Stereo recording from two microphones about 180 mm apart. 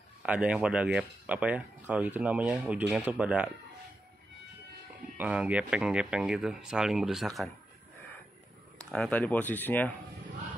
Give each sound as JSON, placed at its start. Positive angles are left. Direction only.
{"t": 0.2, "sound": "speech", "side_deg": -5}
{"t": 5.1, "sound": "speech", "side_deg": -5}
{"t": 8.9, "sound": "speech", "side_deg": 5}